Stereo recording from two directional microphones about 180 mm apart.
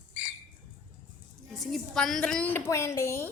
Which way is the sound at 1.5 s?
Centre (ahead or behind).